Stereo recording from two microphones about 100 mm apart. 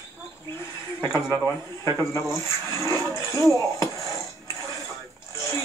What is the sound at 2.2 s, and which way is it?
Speech, 25° left (ahead or behind).